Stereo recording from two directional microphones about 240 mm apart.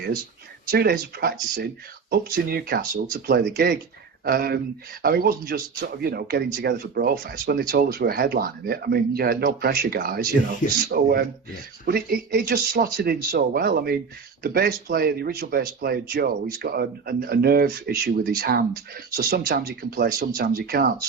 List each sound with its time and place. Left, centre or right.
0.7 s speech: right